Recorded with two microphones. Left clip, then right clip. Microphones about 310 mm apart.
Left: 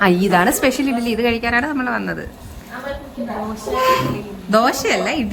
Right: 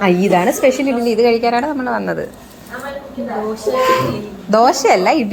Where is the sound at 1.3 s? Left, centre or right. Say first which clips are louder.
Right 4 dB; centre.